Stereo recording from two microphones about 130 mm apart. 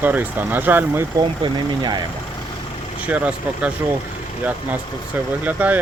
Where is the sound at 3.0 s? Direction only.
10° right (ahead or behind).